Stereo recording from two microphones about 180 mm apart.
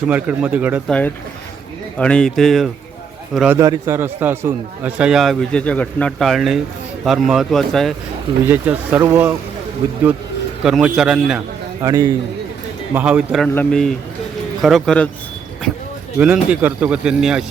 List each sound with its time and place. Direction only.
0.1 s speech: 10° right (ahead or behind)
0.9 s a man's voice: 5° left (ahead or behind)
3.6 s a man's voice: 15° right (ahead or behind); by 7.9 s centre (ahead or behind)
8.4 s speech: 10° right (ahead or behind)
10.6 s a man's voice: 5° right (ahead or behind)
11.8 s a man's voice: 20° right (ahead or behind)
12.9 s speech: 10° right (ahead or behind)
13.5 s a man's voice: 5° left (ahead or behind)
16.1 s a man's voice: 5° right (ahead or behind)